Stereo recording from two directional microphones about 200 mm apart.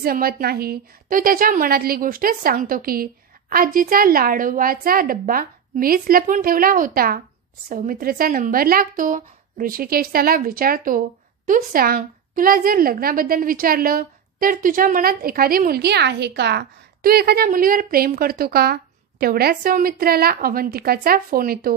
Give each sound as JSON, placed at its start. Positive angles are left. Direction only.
{"t": 0.0, "sound": "a woman's voice", "side_deg": -50}